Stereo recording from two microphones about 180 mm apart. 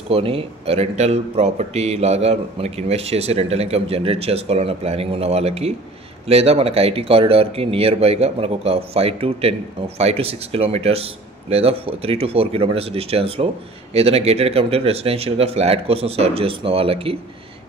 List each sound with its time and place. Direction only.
0.1 s speech: 30° right (ahead or behind)